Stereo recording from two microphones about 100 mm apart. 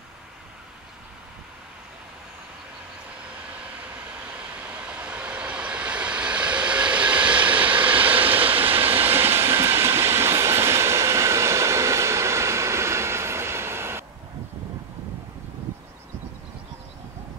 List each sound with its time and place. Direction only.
4.6 s vehicle: 15° right (ahead or behind)
8.8 s train: 20° right (ahead or behind)